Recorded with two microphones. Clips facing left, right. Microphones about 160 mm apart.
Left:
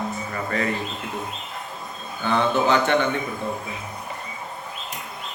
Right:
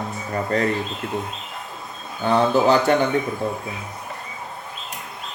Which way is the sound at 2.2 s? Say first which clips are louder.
Right 4 dB; 35° right (ahead or behind).